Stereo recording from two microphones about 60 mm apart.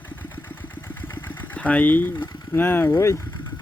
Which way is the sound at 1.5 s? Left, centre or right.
Left.